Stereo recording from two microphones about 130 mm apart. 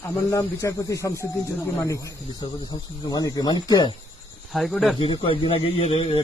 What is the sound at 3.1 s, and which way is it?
Speech, 30° left (ahead or behind).